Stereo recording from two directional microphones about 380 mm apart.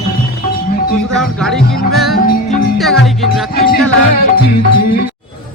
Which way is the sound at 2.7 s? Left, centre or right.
Centre.